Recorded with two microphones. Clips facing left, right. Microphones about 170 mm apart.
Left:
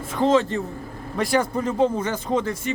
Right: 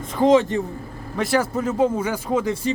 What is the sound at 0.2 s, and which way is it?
Speech, 15° right (ahead or behind).